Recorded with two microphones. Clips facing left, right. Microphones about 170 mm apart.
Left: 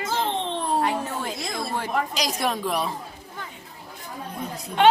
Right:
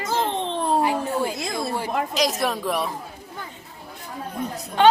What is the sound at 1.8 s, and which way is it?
A woman's voice, centre (ahead or behind).